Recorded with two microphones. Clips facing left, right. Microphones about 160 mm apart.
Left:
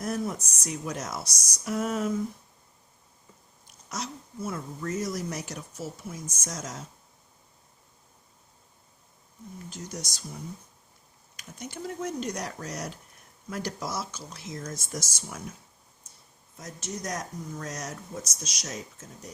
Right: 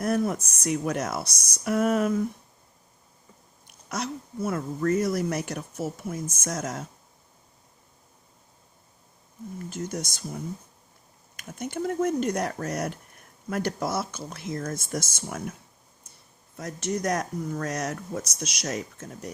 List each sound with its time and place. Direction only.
0.0 s speech: 60° right (ahead or behind)
3.7 s speech: 60° right (ahead or behind)
9.6 s speech: 55° right (ahead or behind)
16.6 s speech: 60° right (ahead or behind)